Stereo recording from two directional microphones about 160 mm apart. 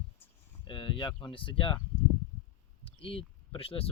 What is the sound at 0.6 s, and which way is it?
Speech, 30° left (ahead or behind).